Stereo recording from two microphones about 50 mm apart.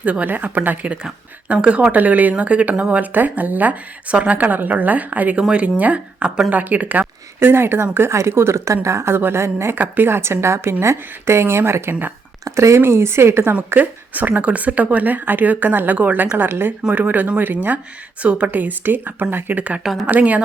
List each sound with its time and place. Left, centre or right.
0.0 s speech: right
1.5 s speech: centre
1.8 s speech: right
2.9 s speech: right
5.4 s speech: right
7.3 s speech: right
8.1 s a woman's voice: right
9.1 s a woman's voice: right
9.7 s a woman's voice: right
12.5 s a woman's voice: right
13.7 s speech: right
16.9 s speech: right